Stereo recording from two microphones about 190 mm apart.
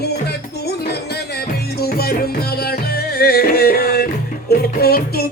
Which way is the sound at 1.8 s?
55° left (ahead or behind).